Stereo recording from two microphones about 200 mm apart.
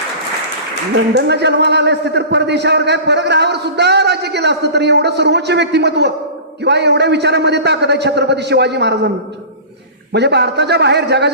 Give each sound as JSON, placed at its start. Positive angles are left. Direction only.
{"t": 0.9, "sound": "a man's voice", "side_deg": -55}
{"t": 10.1, "sound": "a man's voice", "side_deg": -55}